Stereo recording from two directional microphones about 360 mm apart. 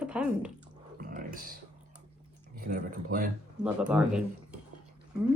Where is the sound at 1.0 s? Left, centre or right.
Right.